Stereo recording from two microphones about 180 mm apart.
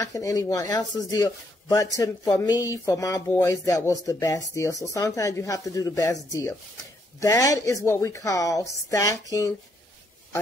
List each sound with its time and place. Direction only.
0.0 s speech: 20° left (ahead or behind)
7.2 s speech: 20° left (ahead or behind)